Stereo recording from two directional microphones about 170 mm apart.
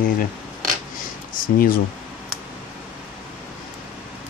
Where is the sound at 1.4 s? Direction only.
55° left (ahead or behind).